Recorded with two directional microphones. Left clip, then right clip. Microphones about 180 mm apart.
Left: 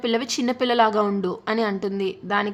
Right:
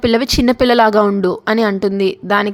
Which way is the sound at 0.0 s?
40° right (ahead or behind).